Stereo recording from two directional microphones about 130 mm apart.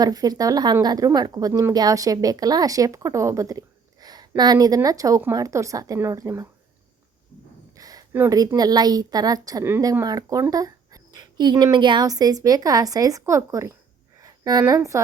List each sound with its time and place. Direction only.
0.0 s speech: 30° right (ahead or behind)
7.8 s a sound: 30° right (ahead or behind)
8.1 s speech: 15° right (ahead or behind)
8.4 s speech: 30° right (ahead or behind)
14.2 s a sound: 30° right (ahead or behind)
14.8 s speech: 25° right (ahead or behind)